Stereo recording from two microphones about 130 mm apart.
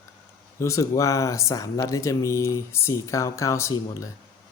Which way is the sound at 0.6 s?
25° left (ahead or behind).